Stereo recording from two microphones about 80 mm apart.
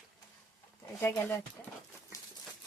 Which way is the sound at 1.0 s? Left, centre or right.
Left.